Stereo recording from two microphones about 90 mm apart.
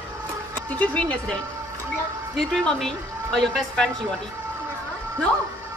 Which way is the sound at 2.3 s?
5° left (ahead or behind).